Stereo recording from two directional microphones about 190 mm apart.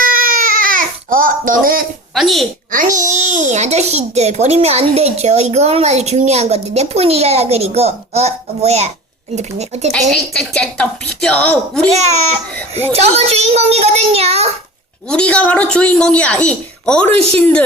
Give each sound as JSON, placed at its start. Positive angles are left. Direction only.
{"t": 0.0, "sound": "baby cry", "side_deg": -50}
{"t": 2.1, "sound": "a woman's voice", "side_deg": 0}
{"t": 2.7, "sound": "a child's voice", "side_deg": -40}
{"t": 10.1, "sound": "a woman's voice", "side_deg": 5}
{"t": 11.9, "sound": "a child's voice", "side_deg": -35}
{"t": 15.1, "sound": "a woman's voice", "side_deg": 5}